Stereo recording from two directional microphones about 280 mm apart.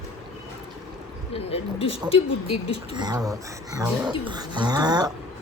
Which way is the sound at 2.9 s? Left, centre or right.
Centre.